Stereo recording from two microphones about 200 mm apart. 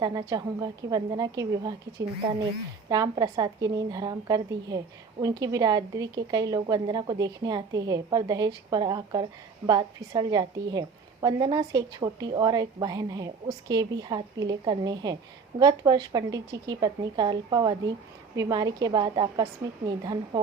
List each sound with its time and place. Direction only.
0.0 s a woman's voice: 20° right (ahead or behind)